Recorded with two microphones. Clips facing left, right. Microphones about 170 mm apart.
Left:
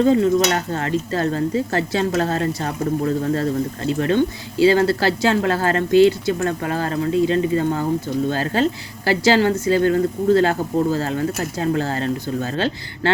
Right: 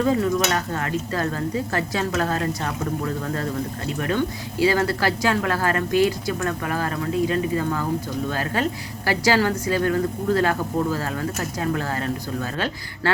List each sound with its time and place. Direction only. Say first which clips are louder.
0.0 s a woman's voice: left 5 dB; 30° left (ahead or behind)